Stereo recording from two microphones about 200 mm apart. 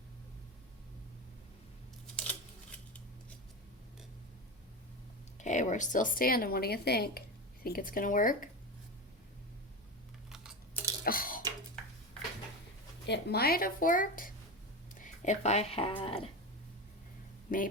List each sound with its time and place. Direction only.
5.4 s a woman's voice: 35° left (ahead or behind)
11.0 s a sound: 45° left (ahead or behind)
13.1 s a woman's voice: 50° left (ahead or behind); by 16.3 s 30° left (ahead or behind)
17.5 s speech: 40° left (ahead or behind)